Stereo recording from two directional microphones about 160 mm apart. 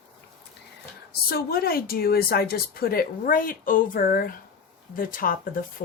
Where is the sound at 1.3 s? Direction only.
70° left (ahead or behind).